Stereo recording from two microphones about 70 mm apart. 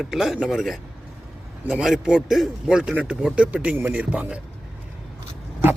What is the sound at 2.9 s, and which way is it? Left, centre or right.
A man's voice, right.